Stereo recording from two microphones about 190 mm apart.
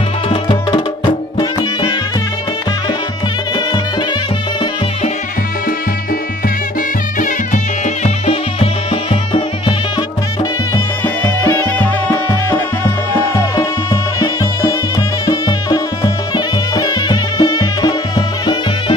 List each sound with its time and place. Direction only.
0.3 s music: 30° left (ahead or behind)
7.2 s music: 40° left (ahead or behind)
11.2 s music: 15° left (ahead or behind)